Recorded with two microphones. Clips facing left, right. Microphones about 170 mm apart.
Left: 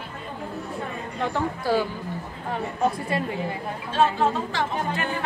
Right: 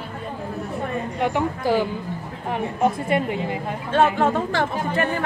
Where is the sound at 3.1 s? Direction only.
20° right (ahead or behind).